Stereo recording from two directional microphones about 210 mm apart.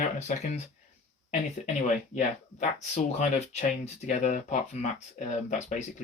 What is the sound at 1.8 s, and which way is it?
Speech, 35° left (ahead or behind).